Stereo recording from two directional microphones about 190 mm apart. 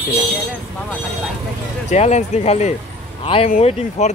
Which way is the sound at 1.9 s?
35° left (ahead or behind).